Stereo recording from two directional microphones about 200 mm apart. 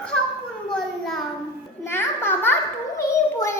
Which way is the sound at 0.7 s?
Centre (ahead or behind).